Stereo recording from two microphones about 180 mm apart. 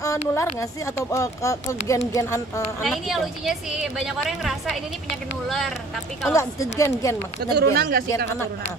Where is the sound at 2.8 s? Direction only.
Centre (ahead or behind).